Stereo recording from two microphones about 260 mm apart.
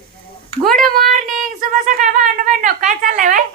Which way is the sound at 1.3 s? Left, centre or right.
Right.